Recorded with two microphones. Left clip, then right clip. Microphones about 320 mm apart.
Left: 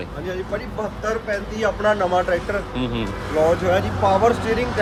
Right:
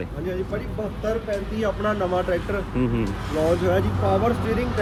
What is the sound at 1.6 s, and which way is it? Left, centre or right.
Speech, left.